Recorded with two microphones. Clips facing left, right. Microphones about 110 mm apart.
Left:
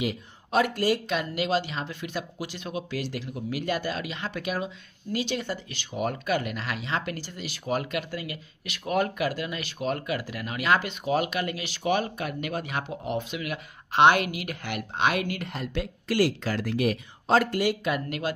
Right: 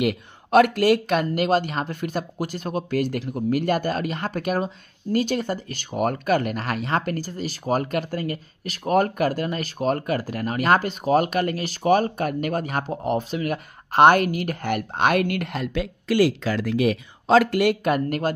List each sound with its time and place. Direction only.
0.0 s speech: 60° right (ahead or behind); by 15.9 s 85° right
17.4 s speech: 75° right (ahead or behind); by 18.3 s 45° right (ahead or behind)